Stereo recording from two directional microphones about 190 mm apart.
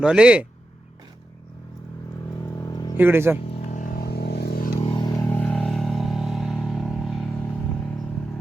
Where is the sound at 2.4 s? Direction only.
20° left (ahead or behind).